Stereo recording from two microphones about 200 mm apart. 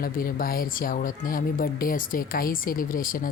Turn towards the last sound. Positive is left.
turn(degrees=45)  # may be behind; listen again after turning